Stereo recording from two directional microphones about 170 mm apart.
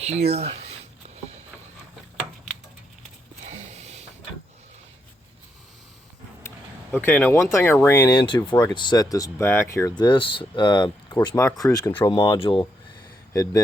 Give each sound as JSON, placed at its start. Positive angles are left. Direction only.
{"t": 0.0, "sound": "a sound", "side_deg": -40}
{"t": 3.4, "sound": "mechanisms", "side_deg": -40}
{"t": 6.9, "sound": "speech", "side_deg": 10}
{"t": 12.1, "sound": "speech", "side_deg": 30}
{"t": 13.3, "sound": "speech", "side_deg": 20}